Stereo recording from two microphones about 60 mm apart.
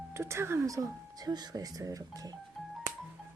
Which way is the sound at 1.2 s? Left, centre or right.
Right.